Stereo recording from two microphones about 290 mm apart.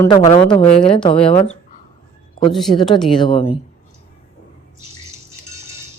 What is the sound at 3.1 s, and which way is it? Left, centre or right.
Speech, centre.